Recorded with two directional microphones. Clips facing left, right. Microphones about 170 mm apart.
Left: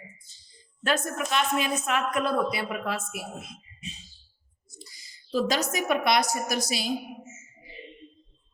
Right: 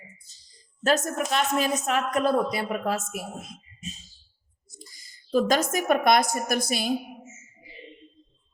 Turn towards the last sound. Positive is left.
turn(degrees=-55)  # may be behind; listen again after turning